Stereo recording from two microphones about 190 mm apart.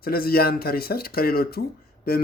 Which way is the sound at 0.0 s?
50° left (ahead or behind).